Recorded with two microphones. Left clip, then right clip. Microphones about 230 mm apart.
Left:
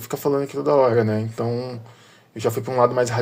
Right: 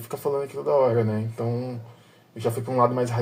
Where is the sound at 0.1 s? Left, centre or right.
Left.